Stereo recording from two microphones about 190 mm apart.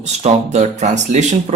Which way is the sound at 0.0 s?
35° right (ahead or behind).